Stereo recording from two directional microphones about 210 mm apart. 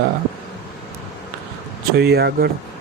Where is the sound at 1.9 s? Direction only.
50° right (ahead or behind).